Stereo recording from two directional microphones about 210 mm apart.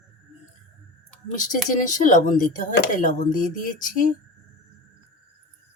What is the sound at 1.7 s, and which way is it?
Speech, 35° left (ahead or behind).